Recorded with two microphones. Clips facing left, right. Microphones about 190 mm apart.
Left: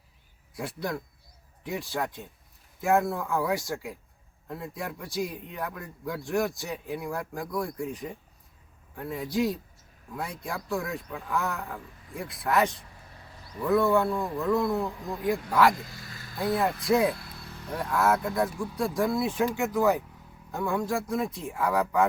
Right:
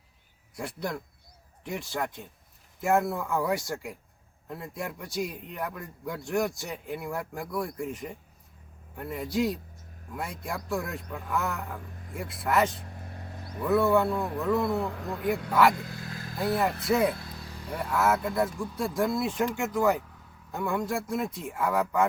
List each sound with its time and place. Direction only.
0.5 s a man's voice: centre (ahead or behind)
12.8 s vehicle: 50° right (ahead or behind)
13.6 s a man's voice: 5° right (ahead or behind)
15.8 s vehicle: 55° right (ahead or behind)
16.4 s a man's voice: centre (ahead or behind)
17.2 s vehicle: 15° right (ahead or behind)
17.7 s a man's voice: 5° right (ahead or behind)